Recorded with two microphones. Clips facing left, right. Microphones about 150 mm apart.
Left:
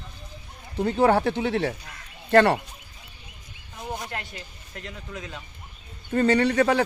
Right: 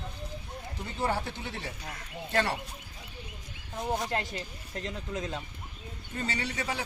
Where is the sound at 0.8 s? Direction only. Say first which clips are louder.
Left 12 dB; 70° left (ahead or behind).